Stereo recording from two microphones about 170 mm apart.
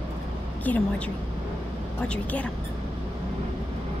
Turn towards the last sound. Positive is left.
turn(degrees=5)  # may be behind; listen again after turning